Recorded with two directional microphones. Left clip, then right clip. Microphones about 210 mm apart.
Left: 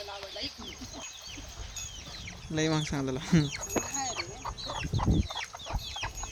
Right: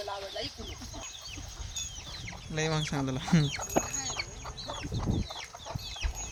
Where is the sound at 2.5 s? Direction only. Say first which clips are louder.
Left 1 dB; 10° right (ahead or behind).